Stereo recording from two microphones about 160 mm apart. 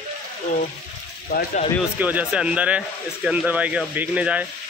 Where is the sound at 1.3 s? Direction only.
65° left (ahead or behind).